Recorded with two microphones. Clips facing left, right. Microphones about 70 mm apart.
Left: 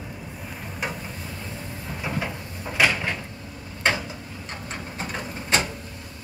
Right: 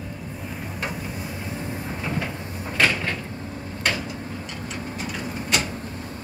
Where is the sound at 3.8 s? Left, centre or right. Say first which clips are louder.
Left 2 dB; left.